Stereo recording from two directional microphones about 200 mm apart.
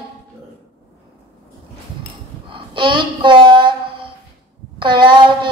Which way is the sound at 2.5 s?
25° right (ahead or behind).